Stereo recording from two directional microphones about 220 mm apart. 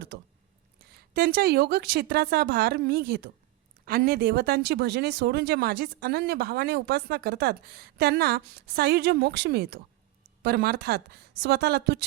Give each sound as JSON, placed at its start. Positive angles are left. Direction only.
{"t": 0.9, "sound": "speech", "side_deg": -45}